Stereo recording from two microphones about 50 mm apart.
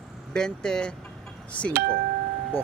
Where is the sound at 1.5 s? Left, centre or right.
Left.